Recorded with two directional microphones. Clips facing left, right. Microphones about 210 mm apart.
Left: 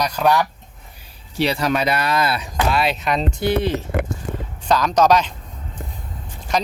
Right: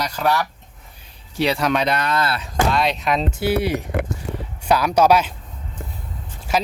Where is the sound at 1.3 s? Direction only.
Centre (ahead or behind).